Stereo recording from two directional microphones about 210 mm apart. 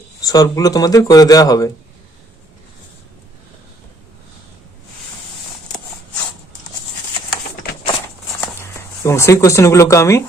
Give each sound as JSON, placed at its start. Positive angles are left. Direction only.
{"t": 0.2, "sound": "speech", "side_deg": 15}
{"t": 9.0, "sound": "speech", "side_deg": 15}